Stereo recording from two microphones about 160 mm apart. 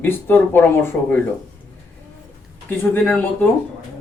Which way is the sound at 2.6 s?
10° left (ahead or behind).